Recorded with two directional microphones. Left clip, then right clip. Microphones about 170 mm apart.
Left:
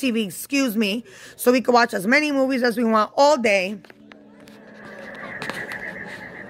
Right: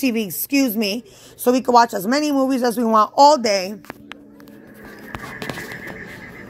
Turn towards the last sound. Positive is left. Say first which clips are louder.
# even
turn(degrees=-5)  # may be behind; listen again after turning